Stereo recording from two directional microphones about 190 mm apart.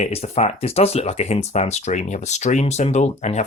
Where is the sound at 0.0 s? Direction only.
35° left (ahead or behind).